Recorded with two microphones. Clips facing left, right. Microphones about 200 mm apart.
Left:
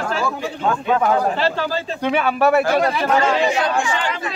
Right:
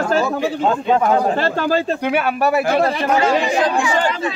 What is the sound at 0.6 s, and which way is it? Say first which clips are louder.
Speech: right 1 dB; 30° right (ahead or behind).